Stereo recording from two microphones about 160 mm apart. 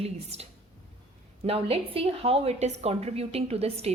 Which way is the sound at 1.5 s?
35° right (ahead or behind).